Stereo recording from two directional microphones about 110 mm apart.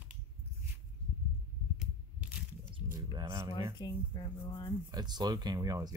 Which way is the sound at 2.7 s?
50° right (ahead or behind).